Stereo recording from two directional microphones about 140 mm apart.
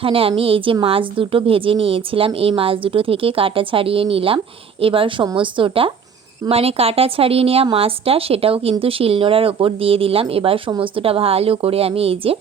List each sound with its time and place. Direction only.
0.0 s a woman's voice: 40° right (ahead or behind)